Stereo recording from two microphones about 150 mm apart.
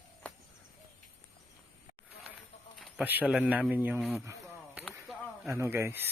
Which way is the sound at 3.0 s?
10° right (ahead or behind).